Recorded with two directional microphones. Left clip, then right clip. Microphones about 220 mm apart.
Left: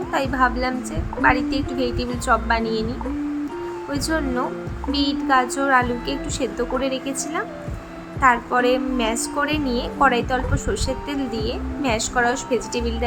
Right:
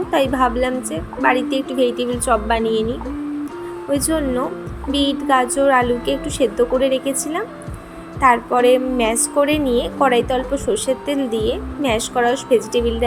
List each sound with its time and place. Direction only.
0.1 s a woman's voice: 10° right (ahead or behind)
3.9 s a woman's voice: 5° right (ahead or behind)